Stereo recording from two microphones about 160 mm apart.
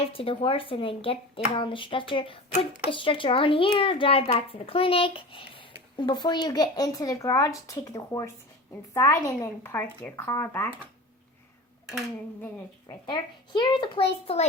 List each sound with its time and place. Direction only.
0.0 s a child's voice: 35° left (ahead or behind); by 10.7 s 15° left (ahead or behind)
13.1 s a child's voice: 30° left (ahead or behind)